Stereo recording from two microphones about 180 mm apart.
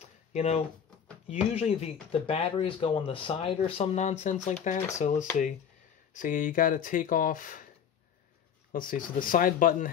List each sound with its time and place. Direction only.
0.3 s speech: 40° left (ahead or behind)
8.7 s speech: 50° left (ahead or behind)